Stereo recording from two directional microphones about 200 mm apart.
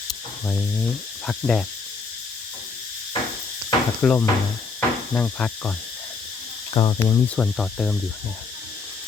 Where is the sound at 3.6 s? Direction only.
10° left (ahead or behind).